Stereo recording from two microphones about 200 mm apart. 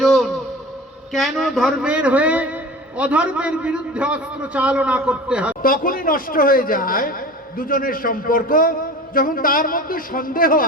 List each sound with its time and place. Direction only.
0.0 s music: centre (ahead or behind)
1.1 s a man's voice: centre (ahead or behind)
5.6 s speech: 45° left (ahead or behind)